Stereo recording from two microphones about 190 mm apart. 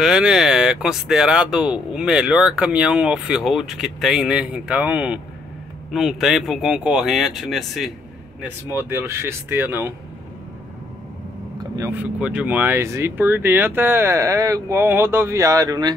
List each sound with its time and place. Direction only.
0.0 s speech: 5° right (ahead or behind)
11.5 s vehicle: 20° right (ahead or behind)
11.9 s speech: 5° right (ahead or behind)